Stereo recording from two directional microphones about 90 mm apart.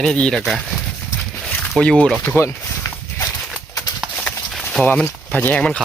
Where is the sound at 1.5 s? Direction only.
10° left (ahead or behind).